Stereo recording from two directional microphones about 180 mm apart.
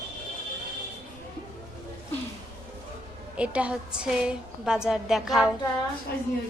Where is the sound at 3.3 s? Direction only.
5° right (ahead or behind).